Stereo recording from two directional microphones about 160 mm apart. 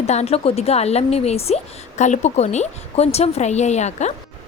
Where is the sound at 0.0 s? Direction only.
40° left (ahead or behind).